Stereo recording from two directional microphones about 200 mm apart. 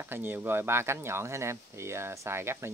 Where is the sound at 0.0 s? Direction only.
10° right (ahead or behind).